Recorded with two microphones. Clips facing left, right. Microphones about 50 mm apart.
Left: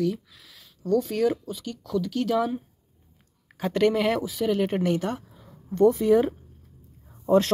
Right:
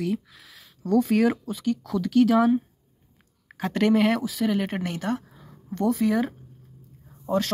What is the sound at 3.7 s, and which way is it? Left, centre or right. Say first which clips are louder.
Speech: right 1 dB; centre.